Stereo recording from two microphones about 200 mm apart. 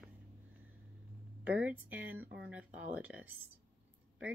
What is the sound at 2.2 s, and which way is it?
Speech, 60° right (ahead or behind).